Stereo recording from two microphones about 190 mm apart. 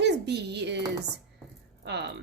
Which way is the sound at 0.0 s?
60° right (ahead or behind).